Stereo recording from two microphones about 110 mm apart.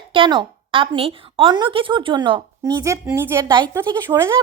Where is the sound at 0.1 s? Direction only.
50° right (ahead or behind); by 4.3 s 25° right (ahead or behind).